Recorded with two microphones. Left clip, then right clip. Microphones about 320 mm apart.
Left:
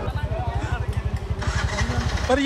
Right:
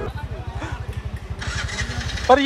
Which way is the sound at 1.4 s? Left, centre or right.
Left.